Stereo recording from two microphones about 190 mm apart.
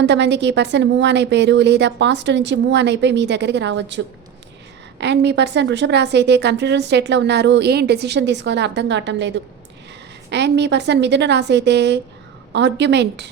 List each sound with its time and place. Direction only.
0.0 s a woman's voice: 65° right (ahead or behind)